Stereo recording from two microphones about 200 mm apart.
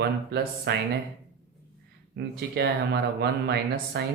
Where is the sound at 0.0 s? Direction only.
55° right (ahead or behind).